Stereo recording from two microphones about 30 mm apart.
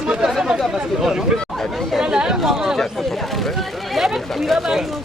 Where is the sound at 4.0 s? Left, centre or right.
Centre.